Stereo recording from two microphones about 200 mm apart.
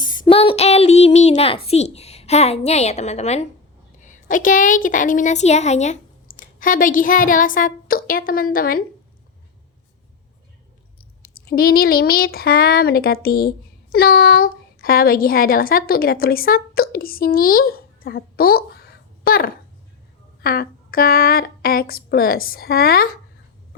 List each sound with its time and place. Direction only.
0.0 s a child's voice: 25° left (ahead or behind); by 8.8 s 45° left (ahead or behind)
11.2 s a woman's voice: 50° left (ahead or behind)